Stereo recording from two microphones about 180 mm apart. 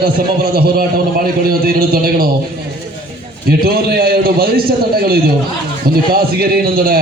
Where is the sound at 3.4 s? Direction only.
60° right (ahead or behind).